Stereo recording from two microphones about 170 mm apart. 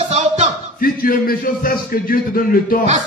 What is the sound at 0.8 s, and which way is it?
A man's voice, 55° left (ahead or behind).